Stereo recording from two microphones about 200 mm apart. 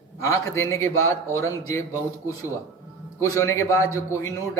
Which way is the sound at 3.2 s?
15° left (ahead or behind).